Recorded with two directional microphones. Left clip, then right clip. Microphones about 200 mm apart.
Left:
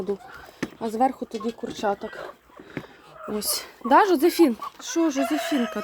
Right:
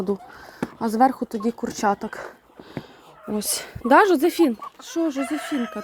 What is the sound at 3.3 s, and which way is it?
Speech, 30° right (ahead or behind).